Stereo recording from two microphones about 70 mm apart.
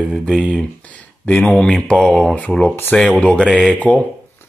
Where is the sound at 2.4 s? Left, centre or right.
Left.